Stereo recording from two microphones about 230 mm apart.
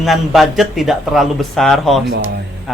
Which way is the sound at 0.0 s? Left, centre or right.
Centre.